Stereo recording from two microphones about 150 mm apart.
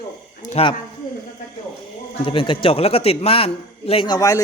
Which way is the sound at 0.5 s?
35° left (ahead or behind).